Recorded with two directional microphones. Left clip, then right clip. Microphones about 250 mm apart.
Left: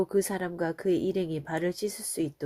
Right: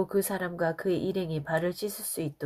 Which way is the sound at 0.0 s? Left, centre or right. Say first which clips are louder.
Left 1 dB; left.